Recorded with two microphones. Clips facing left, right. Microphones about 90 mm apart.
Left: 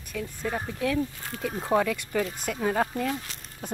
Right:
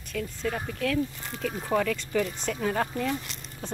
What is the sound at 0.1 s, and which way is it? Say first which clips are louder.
Speech: even; 10° left (ahead or behind).